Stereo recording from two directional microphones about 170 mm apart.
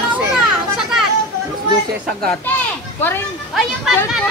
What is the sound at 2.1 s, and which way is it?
Speech, 5° left (ahead or behind).